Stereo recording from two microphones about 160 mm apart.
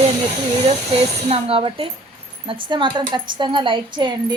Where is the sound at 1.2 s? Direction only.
35° right (ahead or behind).